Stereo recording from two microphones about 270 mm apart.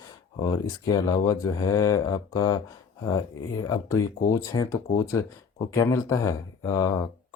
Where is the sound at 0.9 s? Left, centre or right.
Centre.